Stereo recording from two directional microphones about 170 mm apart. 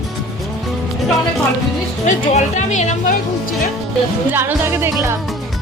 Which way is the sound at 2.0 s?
45° left (ahead or behind).